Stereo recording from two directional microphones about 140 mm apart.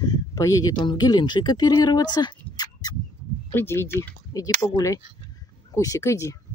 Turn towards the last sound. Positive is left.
turn(degrees=20)  # may be behind; listen again after turning